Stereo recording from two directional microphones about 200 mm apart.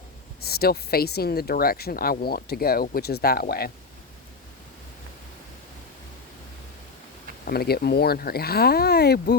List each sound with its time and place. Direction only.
0.4 s speech: 50° left (ahead or behind)
7.4 s speech: 50° left (ahead or behind)